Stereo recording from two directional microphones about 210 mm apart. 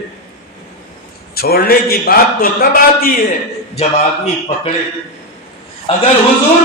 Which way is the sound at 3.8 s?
30° left (ahead or behind).